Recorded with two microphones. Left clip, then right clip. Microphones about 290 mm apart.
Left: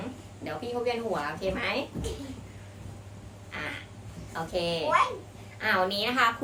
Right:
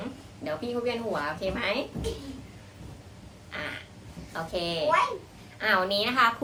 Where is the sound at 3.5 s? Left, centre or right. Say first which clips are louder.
Right 1 dB; centre.